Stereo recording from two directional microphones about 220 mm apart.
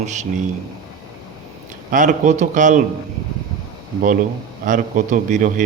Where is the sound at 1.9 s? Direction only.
35° right (ahead or behind).